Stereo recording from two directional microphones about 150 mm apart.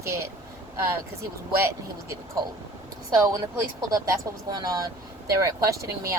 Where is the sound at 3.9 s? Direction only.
25° right (ahead or behind).